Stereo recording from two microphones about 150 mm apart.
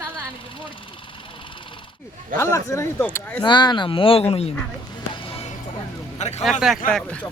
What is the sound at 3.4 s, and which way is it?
Speech, 30° left (ahead or behind).